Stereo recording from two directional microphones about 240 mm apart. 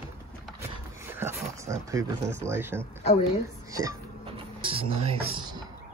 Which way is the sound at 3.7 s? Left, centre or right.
Centre.